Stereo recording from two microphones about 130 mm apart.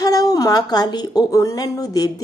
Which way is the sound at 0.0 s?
30° left (ahead or behind).